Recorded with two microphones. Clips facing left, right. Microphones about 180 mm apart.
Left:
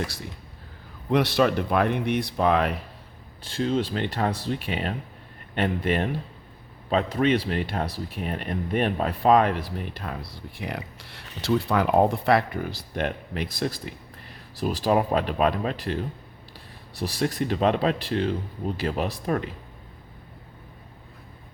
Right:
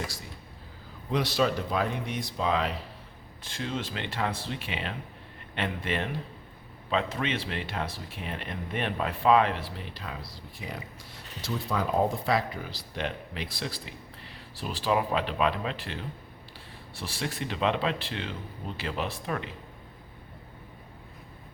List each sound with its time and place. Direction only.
1.1 s speech: 60° left (ahead or behind)
3.4 s speech: 35° left (ahead or behind)